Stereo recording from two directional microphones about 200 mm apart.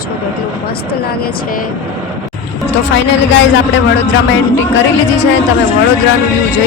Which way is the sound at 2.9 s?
65° left (ahead or behind).